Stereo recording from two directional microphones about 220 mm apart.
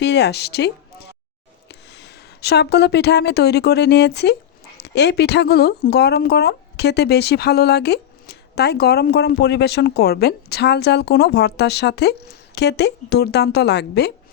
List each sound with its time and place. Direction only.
0.0 s speech: 50° left (ahead or behind)